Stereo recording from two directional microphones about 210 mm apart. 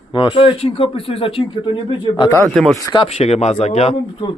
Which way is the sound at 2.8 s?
25° left (ahead or behind).